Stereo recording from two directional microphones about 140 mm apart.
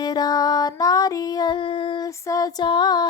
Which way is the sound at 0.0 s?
30° left (ahead or behind).